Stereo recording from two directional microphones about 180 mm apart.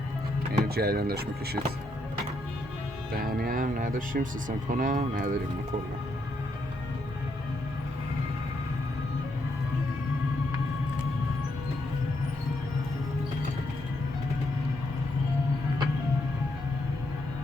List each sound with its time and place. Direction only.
0.6 s speech: 60° right (ahead or behind)
3.1 s speech: 55° right (ahead or behind)